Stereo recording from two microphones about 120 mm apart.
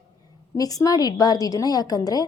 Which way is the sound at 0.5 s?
30° left (ahead or behind).